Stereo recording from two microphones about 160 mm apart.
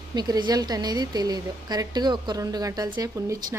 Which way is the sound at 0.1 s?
25° right (ahead or behind).